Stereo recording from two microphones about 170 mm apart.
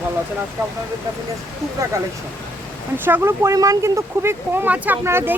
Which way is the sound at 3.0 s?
15° right (ahead or behind).